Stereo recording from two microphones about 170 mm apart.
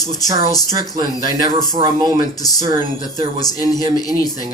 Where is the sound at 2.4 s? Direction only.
20° left (ahead or behind).